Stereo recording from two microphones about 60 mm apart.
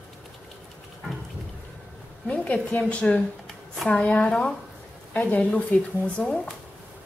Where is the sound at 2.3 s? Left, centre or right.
Left.